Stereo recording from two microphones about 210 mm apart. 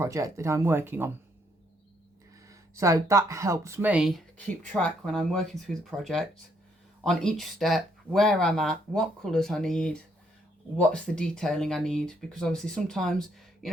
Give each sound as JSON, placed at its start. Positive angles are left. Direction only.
{"t": 0.0, "sound": "speech", "side_deg": -15}
{"t": 2.5, "sound": "speech", "side_deg": -15}